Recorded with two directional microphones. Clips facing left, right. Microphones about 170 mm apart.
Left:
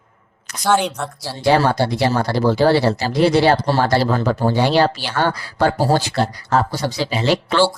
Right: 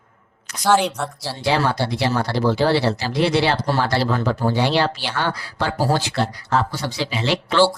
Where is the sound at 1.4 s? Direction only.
50° left (ahead or behind).